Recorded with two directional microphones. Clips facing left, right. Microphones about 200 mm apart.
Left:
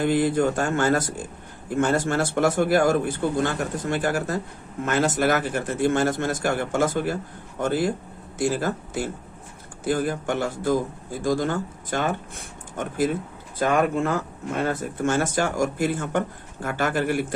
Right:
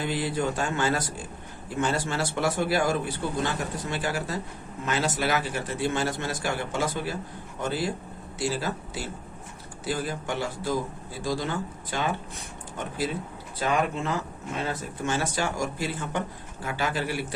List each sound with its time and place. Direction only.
0.0 s speech: 50° left (ahead or behind)